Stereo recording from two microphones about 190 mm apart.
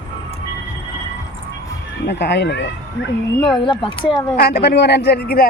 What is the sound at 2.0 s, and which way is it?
Speech, 65° left (ahead or behind).